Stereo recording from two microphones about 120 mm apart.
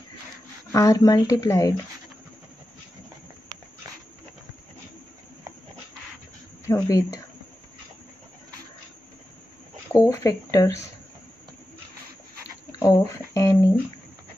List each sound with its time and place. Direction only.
0.7 s speech: 25° left (ahead or behind)
6.7 s speech: 30° left (ahead or behind)
9.9 s speech: 30° left (ahead or behind)
12.7 s speech: 30° left (ahead or behind)